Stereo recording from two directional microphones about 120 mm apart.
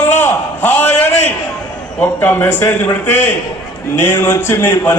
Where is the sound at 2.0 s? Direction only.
15° left (ahead or behind).